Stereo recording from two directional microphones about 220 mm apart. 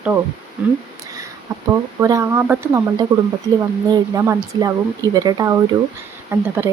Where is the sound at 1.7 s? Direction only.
15° right (ahead or behind).